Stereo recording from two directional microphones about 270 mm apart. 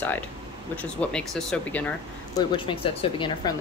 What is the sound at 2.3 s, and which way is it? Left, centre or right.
Speech, centre.